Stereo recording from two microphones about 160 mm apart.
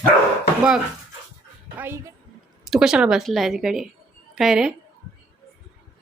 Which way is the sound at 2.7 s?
5° right (ahead or behind).